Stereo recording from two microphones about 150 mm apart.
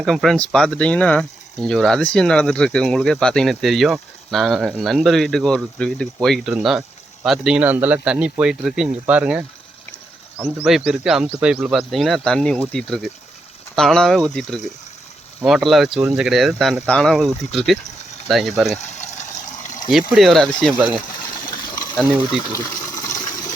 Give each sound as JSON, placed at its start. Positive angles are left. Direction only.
{"t": 0.0, "sound": "speech", "side_deg": 0}
{"t": 13.7, "sound": "speech", "side_deg": 5}
{"t": 18.8, "sound": "water", "side_deg": 50}
{"t": 19.9, "sound": "speech", "side_deg": 0}
{"t": 22.3, "sound": "water", "side_deg": 25}